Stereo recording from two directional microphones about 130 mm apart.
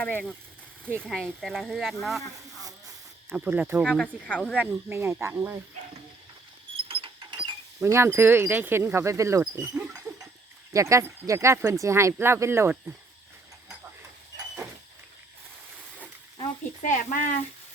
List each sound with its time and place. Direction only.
0.0 s speech: 10° left (ahead or behind)
3.3 s speech: 10° right (ahead or behind)
3.8 s speech: 5° left (ahead or behind)
4.5 s speech: 15° right (ahead or behind)
6.8 s a sound: 45° right (ahead or behind)
7.9 s speech: 20° right (ahead or behind)
10.7 s speech: 25° right (ahead or behind)
16.8 s speech: 85° left